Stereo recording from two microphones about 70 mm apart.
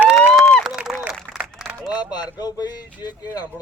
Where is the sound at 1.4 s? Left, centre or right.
Centre.